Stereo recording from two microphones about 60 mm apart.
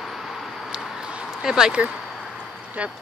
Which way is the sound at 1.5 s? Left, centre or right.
Centre.